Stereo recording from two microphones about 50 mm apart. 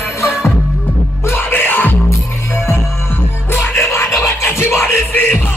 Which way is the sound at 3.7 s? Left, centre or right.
Left.